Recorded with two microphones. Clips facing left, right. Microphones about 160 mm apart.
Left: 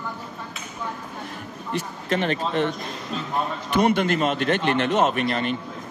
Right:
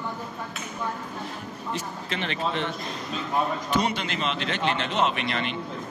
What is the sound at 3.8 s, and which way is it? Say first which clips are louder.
A man's voice: left 8 dB; 50° left (ahead or behind).